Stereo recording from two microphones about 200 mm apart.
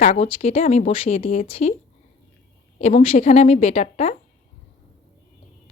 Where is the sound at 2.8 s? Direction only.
30° left (ahead or behind).